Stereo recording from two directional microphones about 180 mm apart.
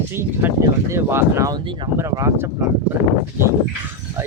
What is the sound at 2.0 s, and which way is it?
Speech, 15° right (ahead or behind).